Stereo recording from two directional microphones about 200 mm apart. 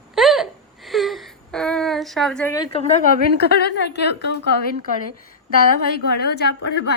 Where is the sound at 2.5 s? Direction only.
20° left (ahead or behind).